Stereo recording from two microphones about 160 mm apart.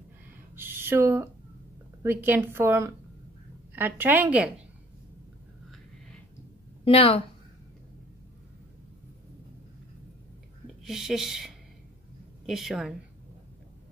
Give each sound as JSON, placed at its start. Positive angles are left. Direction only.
{"t": 0.6, "sound": "a woman's voice", "side_deg": -15}
{"t": 6.8, "sound": "a woman's voice", "side_deg": 35}
{"t": 10.8, "sound": "speech", "side_deg": 0}